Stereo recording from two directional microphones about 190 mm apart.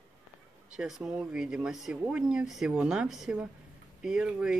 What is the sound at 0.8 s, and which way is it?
Speech, 5° right (ahead or behind).